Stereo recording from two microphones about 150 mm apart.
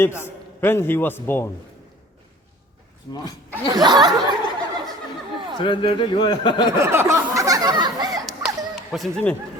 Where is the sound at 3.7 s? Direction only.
25° right (ahead or behind).